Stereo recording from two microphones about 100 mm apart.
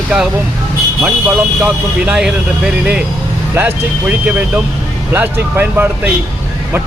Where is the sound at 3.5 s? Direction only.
20° right (ahead or behind).